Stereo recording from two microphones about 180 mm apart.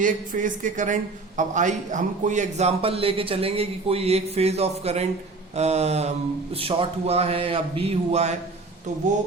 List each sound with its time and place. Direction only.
0.0 s a man's voice: 45° right (ahead or behind)